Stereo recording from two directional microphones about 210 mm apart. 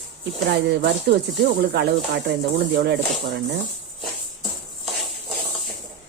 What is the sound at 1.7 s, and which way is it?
A woman's voice, 55° right (ahead or behind).